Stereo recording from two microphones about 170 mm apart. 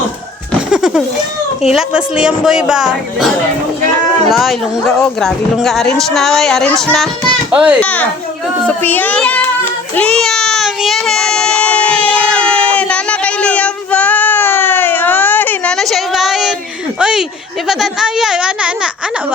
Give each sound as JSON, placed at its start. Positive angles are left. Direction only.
{"t": 0.7, "sound": "a sound", "side_deg": -5}
{"t": 1.7, "sound": "speech", "side_deg": -5}
{"t": 4.3, "sound": "a child's voice", "side_deg": 0}
{"t": 7.8, "sound": "a child's voice", "side_deg": 10}
{"t": 8.6, "sound": "child singing", "side_deg": 10}
{"t": 17.0, "sound": "a sound", "side_deg": -5}
{"t": 17.7, "sound": "speech", "side_deg": 0}